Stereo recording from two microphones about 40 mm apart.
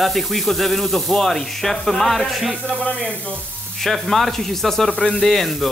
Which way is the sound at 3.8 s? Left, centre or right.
Centre.